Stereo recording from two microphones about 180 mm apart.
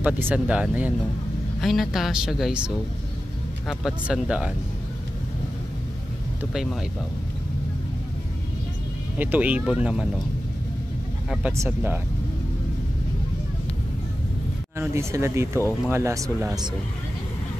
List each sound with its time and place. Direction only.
0.0 s speech: 10° right (ahead or behind)
6.5 s speech: centre (ahead or behind)
9.2 s speech: 10° right (ahead or behind)
11.5 s speech: 15° right (ahead or behind)
14.8 s speech: 15° right (ahead or behind)